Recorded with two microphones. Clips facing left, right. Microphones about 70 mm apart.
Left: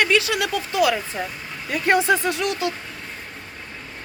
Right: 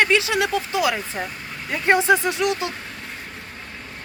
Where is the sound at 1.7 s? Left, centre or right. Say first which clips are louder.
Right 1 dB; right.